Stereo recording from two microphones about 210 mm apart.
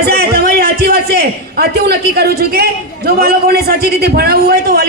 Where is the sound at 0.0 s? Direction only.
50° right (ahead or behind).